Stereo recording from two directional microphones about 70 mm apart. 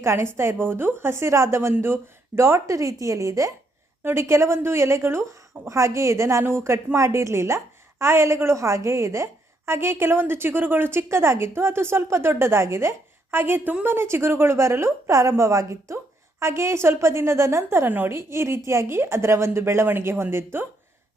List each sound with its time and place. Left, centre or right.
0.0 s a woman's voice: right